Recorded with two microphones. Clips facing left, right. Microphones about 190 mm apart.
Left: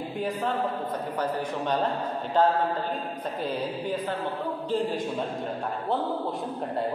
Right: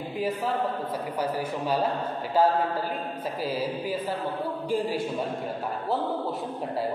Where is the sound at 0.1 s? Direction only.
Centre (ahead or behind).